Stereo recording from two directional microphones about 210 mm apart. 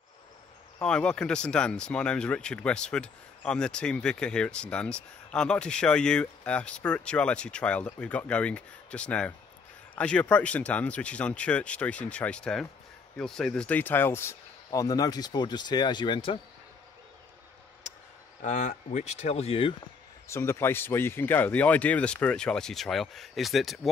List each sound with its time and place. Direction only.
0.7 s speech: 5° left (ahead or behind); by 16.3 s 25° left (ahead or behind)
18.4 s speech: 35° left (ahead or behind)
20.2 s speech: 15° left (ahead or behind)